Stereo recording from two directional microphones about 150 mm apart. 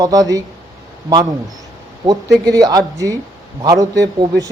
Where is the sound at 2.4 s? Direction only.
25° right (ahead or behind).